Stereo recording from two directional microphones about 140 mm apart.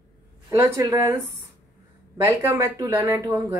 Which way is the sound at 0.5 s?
20° right (ahead or behind).